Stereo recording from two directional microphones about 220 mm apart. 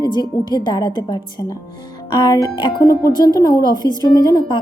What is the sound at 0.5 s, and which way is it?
A woman's voice, 20° left (ahead or behind).